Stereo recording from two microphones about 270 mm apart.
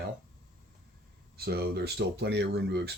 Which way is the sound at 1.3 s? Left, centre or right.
Right.